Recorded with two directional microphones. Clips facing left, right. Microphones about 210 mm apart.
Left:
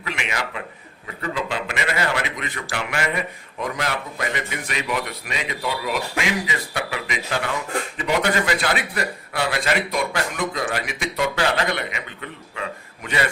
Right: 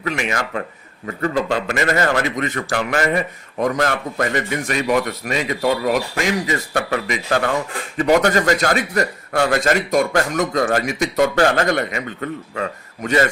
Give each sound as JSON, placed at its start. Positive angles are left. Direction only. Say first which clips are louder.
{"t": 0.0, "sound": "a man's voice", "louder": "right 6 dB", "side_deg": -45}